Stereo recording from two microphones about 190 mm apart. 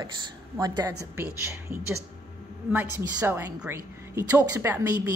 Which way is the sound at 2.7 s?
10° right (ahead or behind).